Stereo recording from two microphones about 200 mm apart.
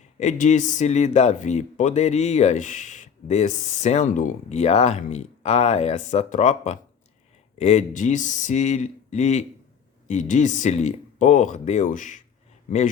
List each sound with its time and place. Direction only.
0.2 s speech: 35° left (ahead or behind)